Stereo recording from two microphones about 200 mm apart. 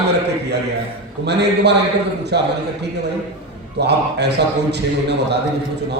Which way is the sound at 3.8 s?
55° right (ahead or behind).